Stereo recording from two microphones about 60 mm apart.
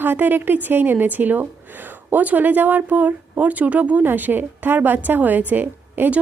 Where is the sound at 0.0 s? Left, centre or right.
Right.